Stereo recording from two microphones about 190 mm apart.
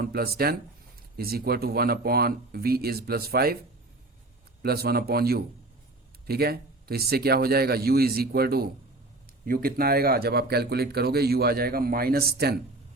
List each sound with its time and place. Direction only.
0.0 s speech: 55° right (ahead or behind)
4.6 s a man's voice: 55° right (ahead or behind)